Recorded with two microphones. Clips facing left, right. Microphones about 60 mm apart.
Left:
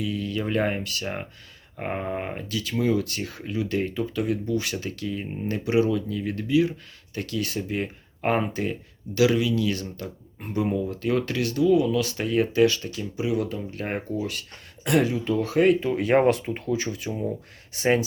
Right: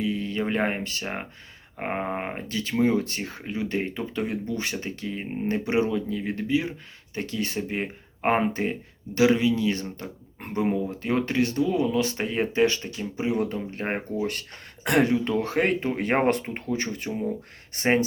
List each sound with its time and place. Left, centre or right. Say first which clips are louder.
0.0 s speech: right 1 dB; right
14.8 s speech: right 1 dB; right